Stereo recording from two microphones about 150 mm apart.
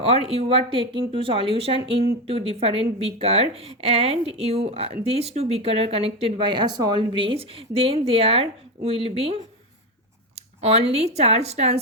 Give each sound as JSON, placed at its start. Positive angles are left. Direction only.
{"t": 0.3, "sound": "a woman's voice", "side_deg": -40}